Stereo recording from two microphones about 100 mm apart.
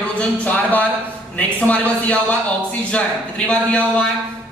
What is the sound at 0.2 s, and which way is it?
A woman's voice, 15° left (ahead or behind).